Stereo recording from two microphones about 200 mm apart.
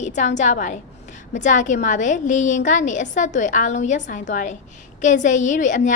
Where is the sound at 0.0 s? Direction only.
35° left (ahead or behind).